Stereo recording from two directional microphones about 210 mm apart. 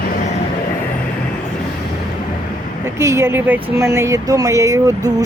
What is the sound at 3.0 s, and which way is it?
Speech, 15° right (ahead or behind).